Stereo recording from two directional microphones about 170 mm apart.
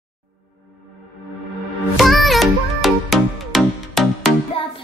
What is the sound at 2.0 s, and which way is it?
Music, centre (ahead or behind).